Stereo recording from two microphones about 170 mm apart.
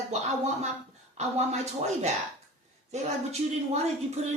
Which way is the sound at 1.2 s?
40° right (ahead or behind).